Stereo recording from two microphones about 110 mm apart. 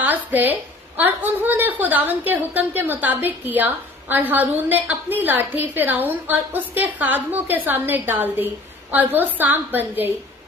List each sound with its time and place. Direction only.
0.0 s a woman's voice: 15° right (ahead or behind)